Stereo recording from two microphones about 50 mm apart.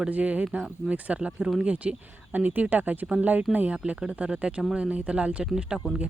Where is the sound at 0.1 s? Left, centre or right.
Right.